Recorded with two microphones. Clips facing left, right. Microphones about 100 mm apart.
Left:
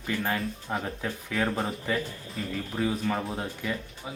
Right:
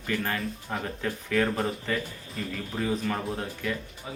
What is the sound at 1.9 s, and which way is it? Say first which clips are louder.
Speech: left 1 dB; 15° left (ahead or behind).